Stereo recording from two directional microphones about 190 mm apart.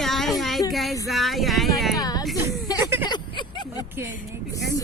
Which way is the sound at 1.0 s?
Centre (ahead or behind).